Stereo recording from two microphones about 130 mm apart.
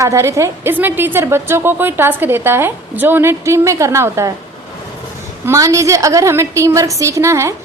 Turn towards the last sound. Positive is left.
turn(degrees=-20)  # may be behind; listen again after turning